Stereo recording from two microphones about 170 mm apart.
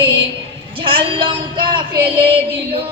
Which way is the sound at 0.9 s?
30° right (ahead or behind).